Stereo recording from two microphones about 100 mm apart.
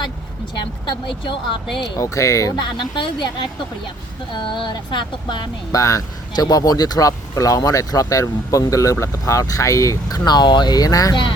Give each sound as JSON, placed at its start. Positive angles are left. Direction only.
{"t": 0.9, "sound": "speech", "side_deg": 55}
{"t": 1.8, "sound": "speech", "side_deg": 30}
{"t": 2.6, "sound": "speech", "side_deg": 50}
{"t": 5.7, "sound": "speech", "side_deg": 35}
{"t": 11.1, "sound": "speech", "side_deg": 55}